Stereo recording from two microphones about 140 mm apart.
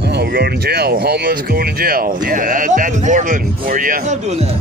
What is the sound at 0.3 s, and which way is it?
Speech, 90° right.